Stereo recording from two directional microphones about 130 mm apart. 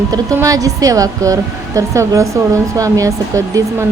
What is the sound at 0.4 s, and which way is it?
A woman's voice, 25° right (ahead or behind).